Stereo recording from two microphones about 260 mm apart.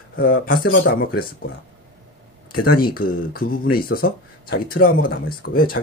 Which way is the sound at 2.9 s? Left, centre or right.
Left.